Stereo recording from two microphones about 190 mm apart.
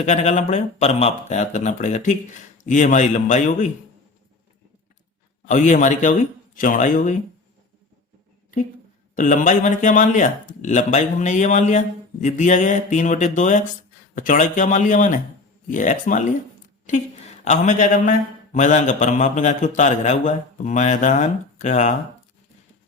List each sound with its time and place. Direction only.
0.0 s a man's voice: 35° left (ahead or behind)
5.5 s a man's voice: 40° left (ahead or behind)
9.1 s a man's voice: 45° left (ahead or behind)
17.4 s a man's voice: 40° left (ahead or behind)